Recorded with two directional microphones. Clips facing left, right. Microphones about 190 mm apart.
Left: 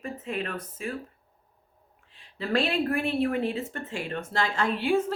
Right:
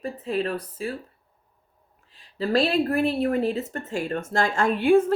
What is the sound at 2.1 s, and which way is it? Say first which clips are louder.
Speech: right 4 dB; 35° right (ahead or behind).